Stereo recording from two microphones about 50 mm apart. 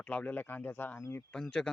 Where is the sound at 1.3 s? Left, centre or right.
Centre.